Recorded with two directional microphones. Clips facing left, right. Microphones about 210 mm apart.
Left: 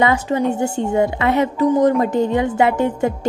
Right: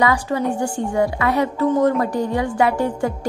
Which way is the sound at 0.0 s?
25° left (ahead or behind).